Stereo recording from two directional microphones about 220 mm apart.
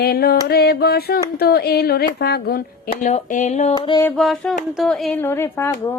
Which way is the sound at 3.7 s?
20° left (ahead or behind).